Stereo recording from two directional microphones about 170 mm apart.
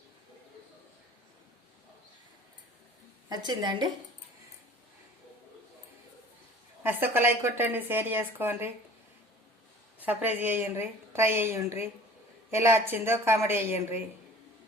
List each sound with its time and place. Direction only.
3.2 s a woman's voice: 20° right (ahead or behind)
6.8 s a woman's voice: 10° right (ahead or behind)
10.0 s a woman's voice: 10° right (ahead or behind)